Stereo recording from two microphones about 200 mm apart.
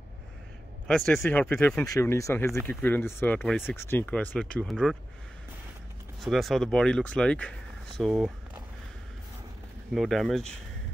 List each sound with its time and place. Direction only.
0.8 s speech: 5° left (ahead or behind)
3.7 s speech: 10° left (ahead or behind)
6.2 s speech: centre (ahead or behind)
9.9 s speech: centre (ahead or behind)